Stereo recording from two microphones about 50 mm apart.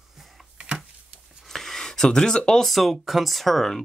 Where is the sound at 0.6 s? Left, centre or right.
Right.